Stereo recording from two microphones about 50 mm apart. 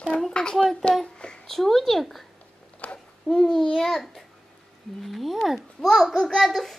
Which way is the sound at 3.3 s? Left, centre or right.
Centre.